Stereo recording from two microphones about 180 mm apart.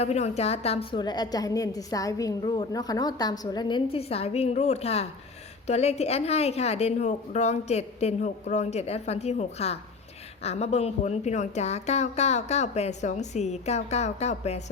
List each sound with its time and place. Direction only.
0.0 s a woman's voice: 35° left (ahead or behind)